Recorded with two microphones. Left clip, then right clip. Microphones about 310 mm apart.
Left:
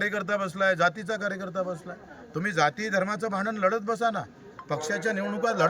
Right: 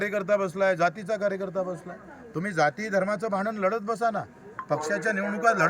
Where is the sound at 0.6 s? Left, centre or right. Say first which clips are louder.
Even; centre.